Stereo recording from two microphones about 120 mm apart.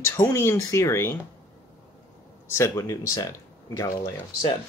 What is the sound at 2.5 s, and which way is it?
Speech, 25° left (ahead or behind).